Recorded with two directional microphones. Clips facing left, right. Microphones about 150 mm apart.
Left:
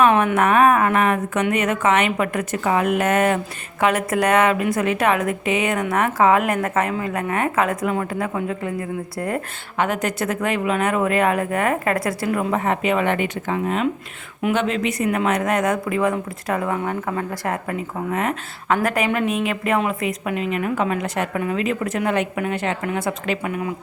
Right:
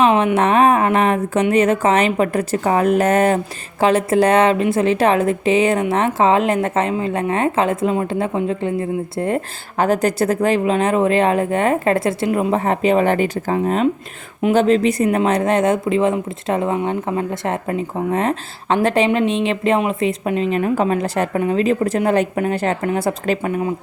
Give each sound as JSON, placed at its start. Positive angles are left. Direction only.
{"t": 0.0, "sound": "a woman's voice", "side_deg": -20}